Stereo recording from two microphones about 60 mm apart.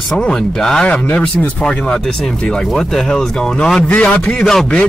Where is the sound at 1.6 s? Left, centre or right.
Centre.